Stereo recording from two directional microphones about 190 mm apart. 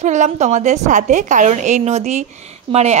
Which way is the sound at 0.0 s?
40° right (ahead or behind).